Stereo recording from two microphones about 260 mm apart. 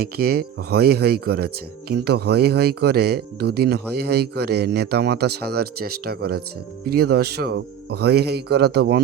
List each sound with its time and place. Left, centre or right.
0.0 s speech: right